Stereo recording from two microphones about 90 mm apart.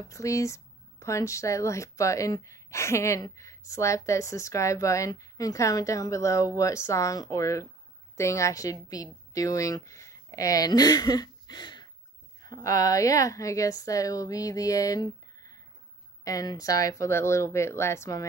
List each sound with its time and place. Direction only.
0.1 s a woman's voice: 35° left (ahead or behind); by 11.9 s 55° left (ahead or behind)
12.4 s speech: 40° left (ahead or behind)